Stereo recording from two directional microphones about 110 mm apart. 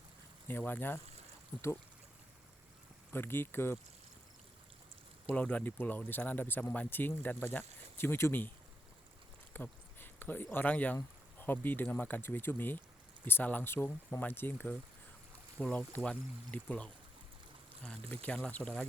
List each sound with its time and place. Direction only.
0.4 s speech: 20° left (ahead or behind)
3.1 s speech: 20° left (ahead or behind)
5.3 s speech: 10° left (ahead or behind)
18.1 s speech: 15° left (ahead or behind)